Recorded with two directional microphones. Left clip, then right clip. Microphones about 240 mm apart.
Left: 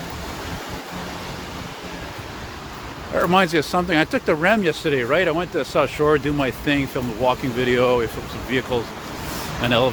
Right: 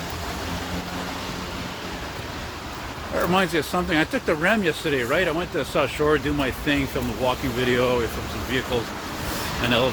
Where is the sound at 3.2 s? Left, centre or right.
Left.